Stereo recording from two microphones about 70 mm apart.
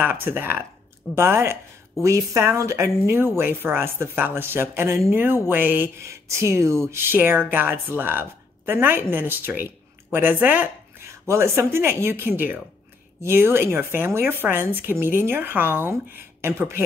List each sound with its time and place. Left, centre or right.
0.0 s a woman's voice: right
3.3 s speech: right
6.5 s a woman's voice: right
11.2 s speech: right